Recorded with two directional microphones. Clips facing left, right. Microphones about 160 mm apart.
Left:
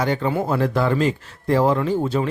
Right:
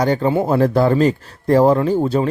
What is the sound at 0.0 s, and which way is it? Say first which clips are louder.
Speech: right 5 dB; 35° right (ahead or behind).